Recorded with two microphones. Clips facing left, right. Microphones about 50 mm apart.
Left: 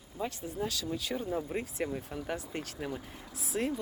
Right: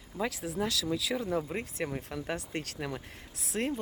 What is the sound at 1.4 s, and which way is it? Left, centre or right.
Speech, right.